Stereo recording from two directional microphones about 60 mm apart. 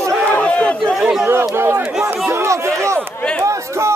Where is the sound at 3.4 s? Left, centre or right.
Right.